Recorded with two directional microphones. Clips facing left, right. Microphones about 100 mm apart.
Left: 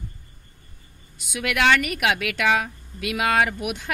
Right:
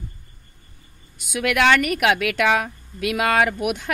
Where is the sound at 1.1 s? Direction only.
50° right (ahead or behind).